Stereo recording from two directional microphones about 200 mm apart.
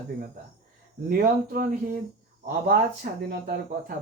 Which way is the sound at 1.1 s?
45° right (ahead or behind).